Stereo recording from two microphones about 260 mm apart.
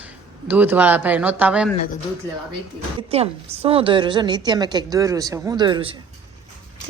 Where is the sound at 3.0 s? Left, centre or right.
Right.